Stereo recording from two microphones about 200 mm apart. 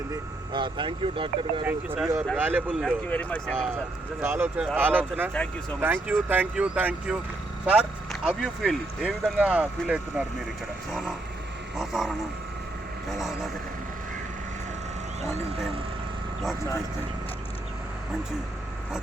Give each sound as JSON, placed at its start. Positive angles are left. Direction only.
{"t": 0.1, "sound": "speech", "side_deg": -25}
{"t": 1.6, "sound": "speech", "side_deg": -10}
{"t": 2.8, "sound": "speech", "side_deg": 5}
{"t": 4.2, "sound": "speech", "side_deg": -10}
{"t": 11.8, "sound": "speech", "side_deg": 0}